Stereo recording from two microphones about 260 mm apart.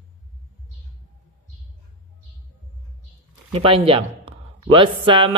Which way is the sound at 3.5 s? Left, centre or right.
Right.